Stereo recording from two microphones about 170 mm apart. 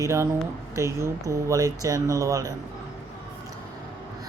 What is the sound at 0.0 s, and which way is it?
A woman's voice, 15° right (ahead or behind).